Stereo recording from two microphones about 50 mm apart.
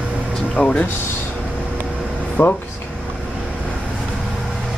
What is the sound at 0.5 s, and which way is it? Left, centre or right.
Music, left.